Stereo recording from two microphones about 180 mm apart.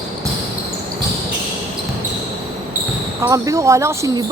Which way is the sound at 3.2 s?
20° right (ahead or behind).